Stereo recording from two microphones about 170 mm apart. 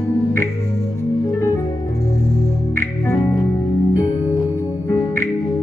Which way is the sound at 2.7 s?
15° left (ahead or behind).